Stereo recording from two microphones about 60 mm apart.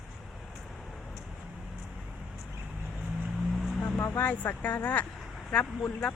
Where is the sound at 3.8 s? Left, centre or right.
Left.